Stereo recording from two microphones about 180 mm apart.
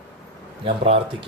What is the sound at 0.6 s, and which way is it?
Speech, 30° right (ahead or behind).